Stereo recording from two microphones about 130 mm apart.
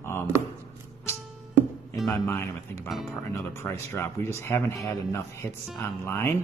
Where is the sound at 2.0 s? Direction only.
20° left (ahead or behind).